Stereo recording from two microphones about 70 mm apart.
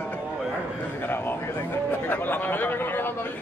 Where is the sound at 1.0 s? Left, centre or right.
Left.